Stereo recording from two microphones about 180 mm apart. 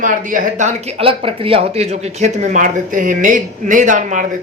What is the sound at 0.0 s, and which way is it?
Speech, 50° right (ahead or behind).